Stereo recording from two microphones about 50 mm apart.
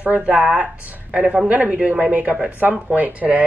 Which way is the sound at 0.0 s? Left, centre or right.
Right.